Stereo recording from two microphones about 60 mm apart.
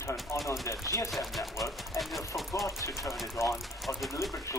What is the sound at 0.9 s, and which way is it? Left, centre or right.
Speech, left.